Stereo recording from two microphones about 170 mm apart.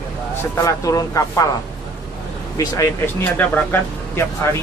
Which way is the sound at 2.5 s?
20° left (ahead or behind).